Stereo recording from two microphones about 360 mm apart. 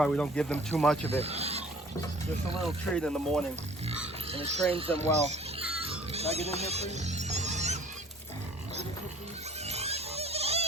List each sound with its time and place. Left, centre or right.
0.0 s speech: centre
1.2 s speech: centre
2.9 s speech: centre
4.3 s speech: centre
5.9 s a sound: centre
6.6 s music: centre
9.6 s a sound: centre